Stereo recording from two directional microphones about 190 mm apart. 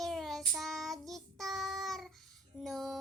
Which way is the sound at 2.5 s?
Centre (ahead or behind).